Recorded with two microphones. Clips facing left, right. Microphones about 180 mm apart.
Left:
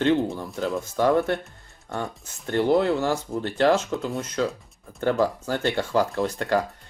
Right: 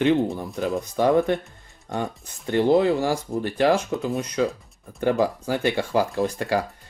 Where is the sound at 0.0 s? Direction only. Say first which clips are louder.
Right 1 dB; 15° right (ahead or behind).